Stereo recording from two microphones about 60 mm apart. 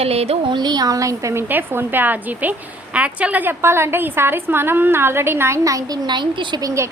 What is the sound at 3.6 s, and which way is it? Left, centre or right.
A woman's voice, right.